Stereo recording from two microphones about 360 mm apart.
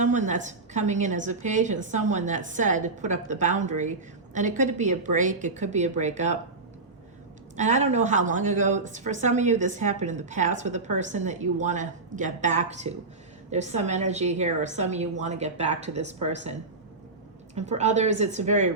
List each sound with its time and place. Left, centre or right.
0.0 s a woman's voice: centre
7.5 s a woman's voice: centre